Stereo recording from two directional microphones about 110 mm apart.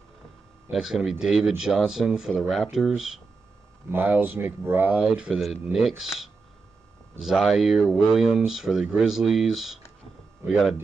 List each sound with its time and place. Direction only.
0.7 s speech: 5° right (ahead or behind)
3.9 s speech: 20° right (ahead or behind)
5.0 s speech: 5° right (ahead or behind)